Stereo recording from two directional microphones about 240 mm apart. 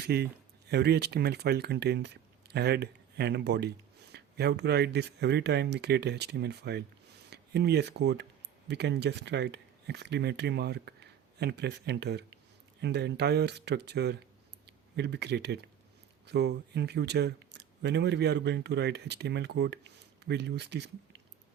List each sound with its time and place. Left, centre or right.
0.1 s speech: right